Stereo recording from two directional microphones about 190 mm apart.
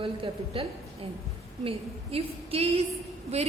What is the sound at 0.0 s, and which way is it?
Speech, 30° right (ahead or behind).